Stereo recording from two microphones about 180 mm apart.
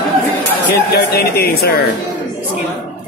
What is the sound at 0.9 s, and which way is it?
Speech, 60° left (ahead or behind).